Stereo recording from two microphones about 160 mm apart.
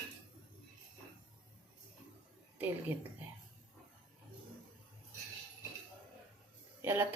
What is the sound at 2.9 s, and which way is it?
Speech, 15° right (ahead or behind).